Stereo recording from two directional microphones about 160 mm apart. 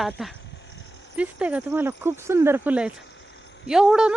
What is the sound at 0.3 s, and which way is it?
Sheep, 90° left.